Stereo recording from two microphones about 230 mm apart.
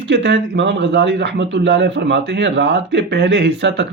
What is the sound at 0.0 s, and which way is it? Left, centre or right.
A man's voice, right.